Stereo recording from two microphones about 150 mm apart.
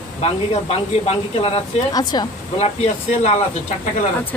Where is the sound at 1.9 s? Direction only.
30° left (ahead or behind).